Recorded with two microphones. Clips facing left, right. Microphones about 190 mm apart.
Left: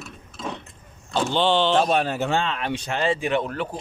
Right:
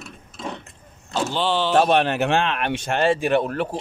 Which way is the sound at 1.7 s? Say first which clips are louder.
Right 3 dB; 65° right (ahead or behind).